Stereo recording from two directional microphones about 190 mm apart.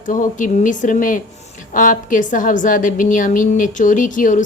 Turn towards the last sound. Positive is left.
turn(degrees=45)  # may be behind; listen again after turning